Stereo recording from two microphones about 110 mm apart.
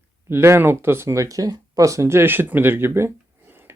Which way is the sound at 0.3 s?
20° right (ahead or behind).